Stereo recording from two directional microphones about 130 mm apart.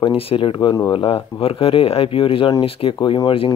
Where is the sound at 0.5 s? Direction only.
30° left (ahead or behind).